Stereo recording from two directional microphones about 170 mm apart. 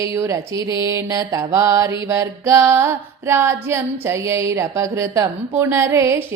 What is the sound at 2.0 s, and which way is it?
Mantra, 15° right (ahead or behind).